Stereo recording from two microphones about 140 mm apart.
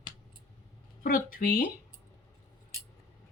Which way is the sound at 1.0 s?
85° left.